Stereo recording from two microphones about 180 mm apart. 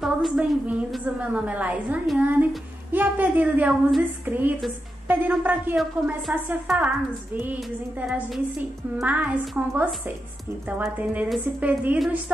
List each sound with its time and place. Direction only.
0.0 s a woman's voice: 5° right (ahead or behind)
8.9 s a woman's voice: 10° right (ahead or behind)